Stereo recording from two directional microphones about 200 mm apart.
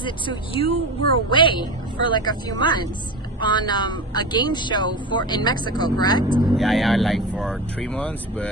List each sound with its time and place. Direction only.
0.0 s speech: 25° left (ahead or behind)
6.5 s speech: centre (ahead or behind)